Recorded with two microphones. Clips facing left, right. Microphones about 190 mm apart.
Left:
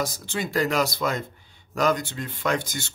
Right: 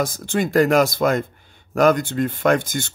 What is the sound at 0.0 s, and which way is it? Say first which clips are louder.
Speech: right 7 dB; 50° right (ahead or behind).